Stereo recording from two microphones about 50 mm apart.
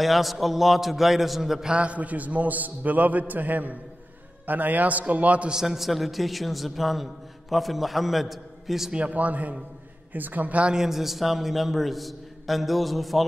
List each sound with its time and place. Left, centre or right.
0.0 s a man's voice: centre
1.7 s a man's voice: right
5.5 s a man's voice: centre
8.9 s a man's voice: right
10.7 s a man's voice: centre